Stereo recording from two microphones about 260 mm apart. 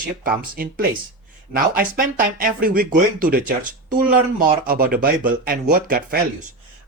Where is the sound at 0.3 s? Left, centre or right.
Right.